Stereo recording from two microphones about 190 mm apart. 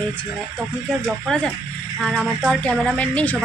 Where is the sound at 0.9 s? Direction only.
Centre (ahead or behind).